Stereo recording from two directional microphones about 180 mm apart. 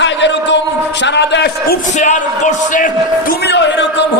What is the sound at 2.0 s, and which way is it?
Speech, 40° left (ahead or behind).